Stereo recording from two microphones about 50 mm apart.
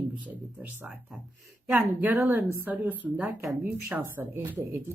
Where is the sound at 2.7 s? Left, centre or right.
Right.